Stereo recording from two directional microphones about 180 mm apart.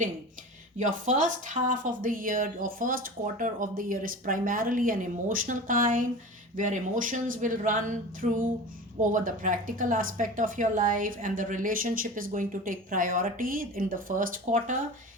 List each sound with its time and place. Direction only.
0.8 s speech: 45° right (ahead or behind)